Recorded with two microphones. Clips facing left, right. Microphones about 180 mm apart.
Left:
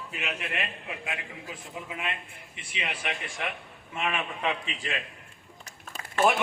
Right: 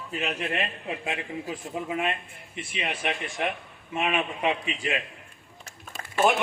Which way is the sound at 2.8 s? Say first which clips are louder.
Right 4 dB; 25° right (ahead or behind).